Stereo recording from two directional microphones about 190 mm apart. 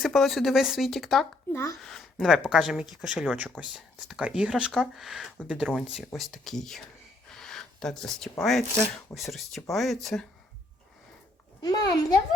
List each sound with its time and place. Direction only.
0.0 s speech: centre (ahead or behind)
11.6 s a child's voice: 20° left (ahead or behind)